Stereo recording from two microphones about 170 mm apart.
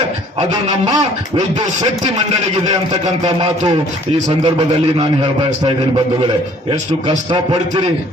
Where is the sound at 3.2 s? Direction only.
40° right (ahead or behind).